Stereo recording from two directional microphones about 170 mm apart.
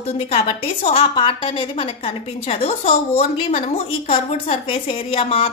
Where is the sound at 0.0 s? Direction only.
35° left (ahead or behind).